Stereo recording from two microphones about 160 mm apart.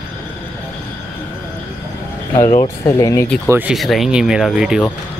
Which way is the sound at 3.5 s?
10° right (ahead or behind).